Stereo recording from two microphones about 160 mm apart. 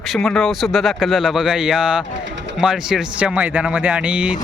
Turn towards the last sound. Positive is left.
turn(degrees=-10)  # may be behind; listen again after turning